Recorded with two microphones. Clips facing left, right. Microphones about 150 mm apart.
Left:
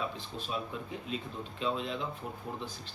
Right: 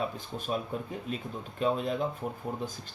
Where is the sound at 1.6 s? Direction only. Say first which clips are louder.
Right 5 dB; 50° right (ahead or behind).